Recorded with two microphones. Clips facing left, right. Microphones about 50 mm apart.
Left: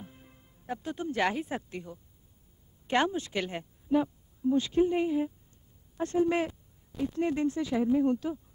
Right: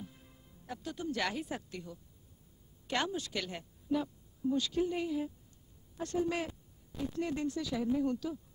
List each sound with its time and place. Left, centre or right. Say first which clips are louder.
0.0 s speech: left 1 dB; left